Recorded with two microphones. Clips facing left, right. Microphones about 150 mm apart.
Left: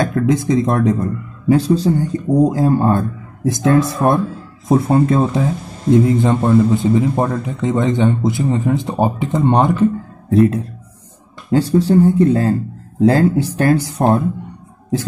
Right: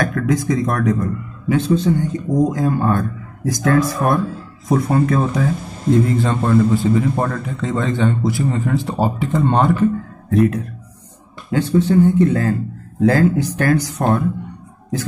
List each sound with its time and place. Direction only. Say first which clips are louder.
0.0 s a man's voice: left 3 dB; 25° left (ahead or behind)
1.5 s a man's voice: left 3 dB; 35° left (ahead or behind); by 9.8 s 20° left (ahead or behind)
10.3 s a man's voice: left 3 dB; 30° left (ahead or behind)